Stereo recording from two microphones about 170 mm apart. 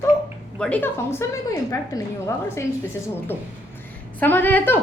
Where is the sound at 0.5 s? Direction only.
5° left (ahead or behind).